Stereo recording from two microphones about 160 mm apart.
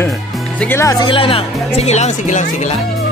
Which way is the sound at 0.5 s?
15° left (ahead or behind).